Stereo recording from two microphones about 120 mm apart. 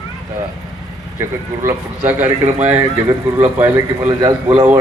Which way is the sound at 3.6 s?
20° right (ahead or behind).